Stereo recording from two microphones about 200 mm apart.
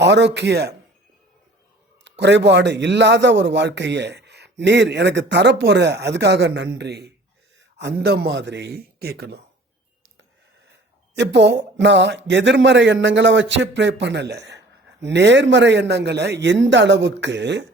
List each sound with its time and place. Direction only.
0.0 s a man's voice: 60° right (ahead or behind)
2.0 s a man's voice: 60° right (ahead or behind)
10.7 s a man's voice: 60° right (ahead or behind)